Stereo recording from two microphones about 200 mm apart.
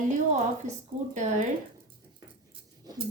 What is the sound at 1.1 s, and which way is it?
Speech, 40° right (ahead or behind).